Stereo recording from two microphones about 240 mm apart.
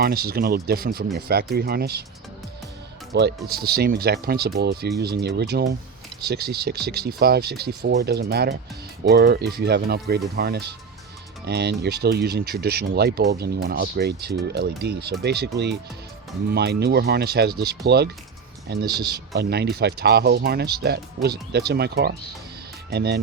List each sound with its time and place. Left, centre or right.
0.0 s speech: right
3.1 s speech: right